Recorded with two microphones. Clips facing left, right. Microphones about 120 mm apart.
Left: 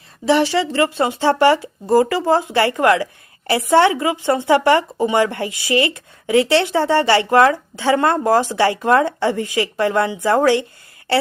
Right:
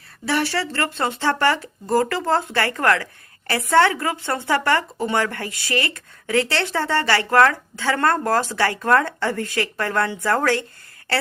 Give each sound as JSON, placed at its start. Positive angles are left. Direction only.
{"t": 0.3, "sound": "speech", "side_deg": 15}